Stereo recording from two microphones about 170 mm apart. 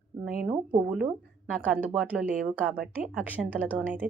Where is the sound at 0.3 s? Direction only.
5° right (ahead or behind).